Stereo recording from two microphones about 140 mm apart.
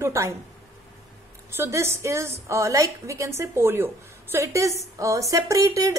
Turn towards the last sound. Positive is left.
turn(degrees=-25)  # may be behind; listen again after turning